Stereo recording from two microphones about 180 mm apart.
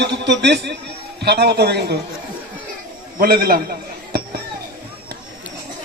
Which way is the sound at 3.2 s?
55° right (ahead or behind).